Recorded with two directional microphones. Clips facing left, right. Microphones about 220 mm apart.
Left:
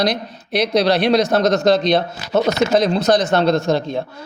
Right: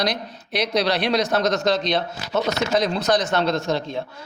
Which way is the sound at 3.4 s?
55° left (ahead or behind).